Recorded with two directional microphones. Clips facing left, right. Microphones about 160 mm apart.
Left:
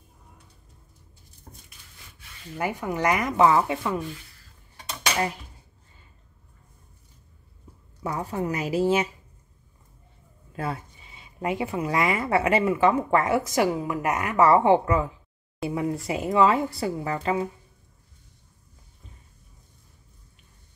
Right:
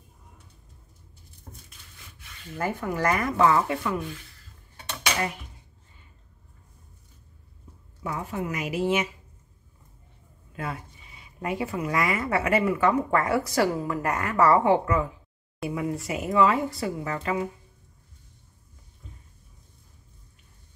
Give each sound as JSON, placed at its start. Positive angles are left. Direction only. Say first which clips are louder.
{"t": 2.5, "sound": "speech", "louder": "left 1 dB", "side_deg": 15}
{"t": 8.0, "sound": "a woman's voice", "louder": "left 3 dB", "side_deg": 35}
{"t": 10.5, "sound": "speech", "louder": "left 3 dB", "side_deg": 35}